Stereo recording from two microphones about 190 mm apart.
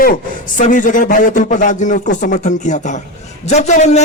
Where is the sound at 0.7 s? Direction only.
45° left (ahead or behind).